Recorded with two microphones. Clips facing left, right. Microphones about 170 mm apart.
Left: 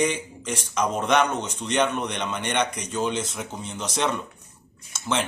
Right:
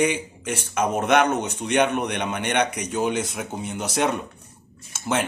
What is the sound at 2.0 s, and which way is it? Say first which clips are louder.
Speech: right 3 dB; 55° right (ahead or behind).